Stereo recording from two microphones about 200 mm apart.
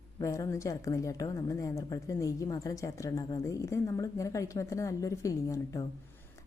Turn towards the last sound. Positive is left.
turn(degrees=15)  # may be behind; listen again after turning